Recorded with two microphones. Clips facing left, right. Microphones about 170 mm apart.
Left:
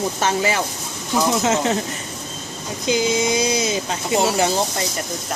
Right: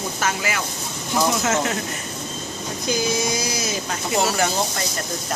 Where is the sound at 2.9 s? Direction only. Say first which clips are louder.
Left 4 dB; 20° left (ahead or behind).